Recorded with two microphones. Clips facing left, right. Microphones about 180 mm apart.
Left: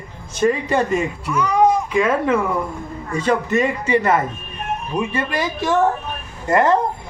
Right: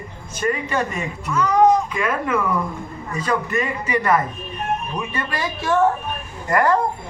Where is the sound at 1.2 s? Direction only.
10° left (ahead or behind).